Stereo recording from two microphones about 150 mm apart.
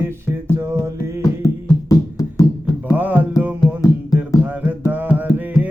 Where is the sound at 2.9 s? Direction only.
10° right (ahead or behind).